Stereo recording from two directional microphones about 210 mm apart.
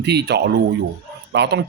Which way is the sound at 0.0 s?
50° right (ahead or behind).